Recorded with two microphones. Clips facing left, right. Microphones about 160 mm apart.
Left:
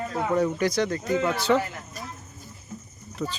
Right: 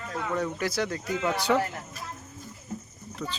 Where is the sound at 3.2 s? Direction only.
20° left (ahead or behind).